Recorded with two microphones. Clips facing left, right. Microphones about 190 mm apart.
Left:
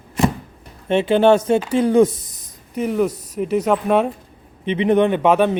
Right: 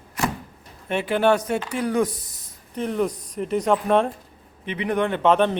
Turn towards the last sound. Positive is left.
turn(degrees=10)  # may be behind; listen again after turning